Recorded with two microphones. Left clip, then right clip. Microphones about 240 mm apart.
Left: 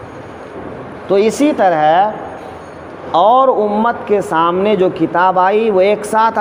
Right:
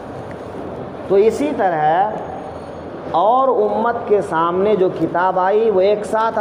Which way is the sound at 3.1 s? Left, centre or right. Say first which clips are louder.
Left 4 dB; left.